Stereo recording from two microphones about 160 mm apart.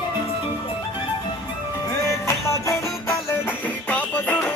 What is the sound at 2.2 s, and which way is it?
Music, 20° left (ahead or behind).